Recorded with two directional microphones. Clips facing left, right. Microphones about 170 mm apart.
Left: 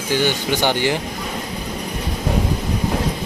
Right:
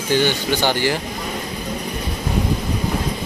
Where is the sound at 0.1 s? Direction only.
15° left (ahead or behind).